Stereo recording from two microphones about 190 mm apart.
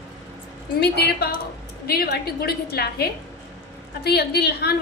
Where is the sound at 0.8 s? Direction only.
60° left (ahead or behind).